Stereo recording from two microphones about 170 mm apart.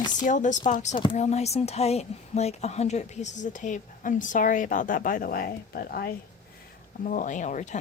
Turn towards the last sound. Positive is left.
turn(degrees=45)  # may be behind; listen again after turning